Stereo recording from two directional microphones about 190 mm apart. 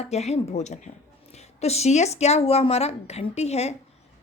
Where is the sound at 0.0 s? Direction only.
35° left (ahead or behind).